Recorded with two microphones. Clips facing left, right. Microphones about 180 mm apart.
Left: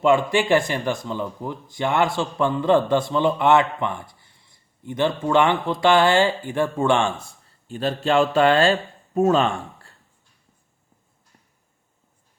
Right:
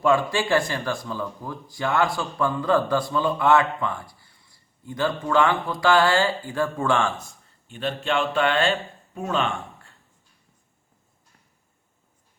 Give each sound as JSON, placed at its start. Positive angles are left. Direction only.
{"t": 0.0, "sound": "speech", "side_deg": 20}
{"t": 7.7, "sound": "speech", "side_deg": 40}